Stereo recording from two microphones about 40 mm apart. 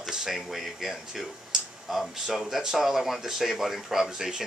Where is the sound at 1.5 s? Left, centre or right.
Centre.